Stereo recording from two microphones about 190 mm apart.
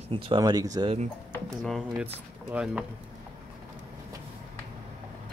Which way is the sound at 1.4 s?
Centre (ahead or behind).